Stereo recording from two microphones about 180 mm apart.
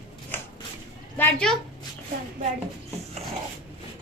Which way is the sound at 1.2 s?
10° left (ahead or behind).